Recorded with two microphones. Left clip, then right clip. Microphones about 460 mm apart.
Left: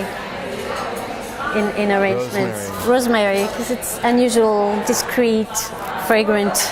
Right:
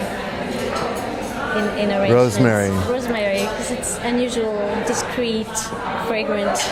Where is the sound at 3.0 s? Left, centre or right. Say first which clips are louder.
Left 4 dB; left.